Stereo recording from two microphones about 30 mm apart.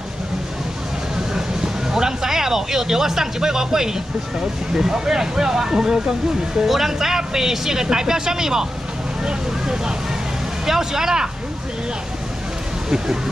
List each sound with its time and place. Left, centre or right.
1.3 s speech: centre
10.6 s speech: centre
12.9 s speech: right